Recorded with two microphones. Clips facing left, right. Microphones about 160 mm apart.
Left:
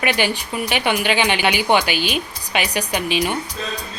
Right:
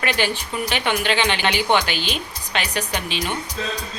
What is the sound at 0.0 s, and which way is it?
A woman's voice, 15° left (ahead or behind).